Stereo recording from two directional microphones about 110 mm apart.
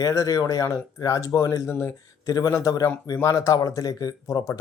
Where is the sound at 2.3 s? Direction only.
35° left (ahead or behind).